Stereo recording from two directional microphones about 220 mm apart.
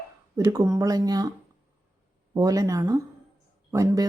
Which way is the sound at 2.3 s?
15° right (ahead or behind).